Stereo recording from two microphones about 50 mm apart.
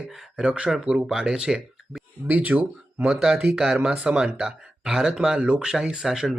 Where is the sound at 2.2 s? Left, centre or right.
Right.